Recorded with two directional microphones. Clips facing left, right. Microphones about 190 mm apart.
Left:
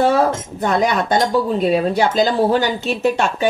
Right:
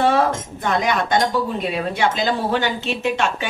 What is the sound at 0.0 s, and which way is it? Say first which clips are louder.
Speech: left 2 dB; 40° left (ahead or behind).